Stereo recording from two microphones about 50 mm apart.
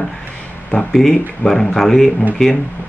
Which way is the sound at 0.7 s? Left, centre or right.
Left.